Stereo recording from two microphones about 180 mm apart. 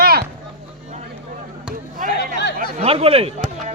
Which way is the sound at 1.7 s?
50° right (ahead or behind).